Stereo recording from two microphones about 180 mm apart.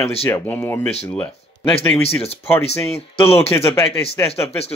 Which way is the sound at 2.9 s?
35° left (ahead or behind).